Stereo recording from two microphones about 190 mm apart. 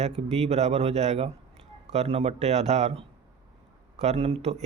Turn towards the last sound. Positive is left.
turn(degrees=-35)  # may be behind; listen again after turning